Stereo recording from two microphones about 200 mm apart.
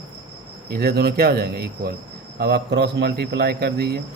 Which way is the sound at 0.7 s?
50° right (ahead or behind).